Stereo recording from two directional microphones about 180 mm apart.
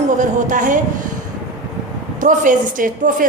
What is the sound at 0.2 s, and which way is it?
Speech, 45° right (ahead or behind).